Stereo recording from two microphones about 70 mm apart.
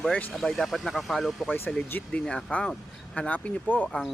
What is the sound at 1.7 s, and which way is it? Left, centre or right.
Speech, centre.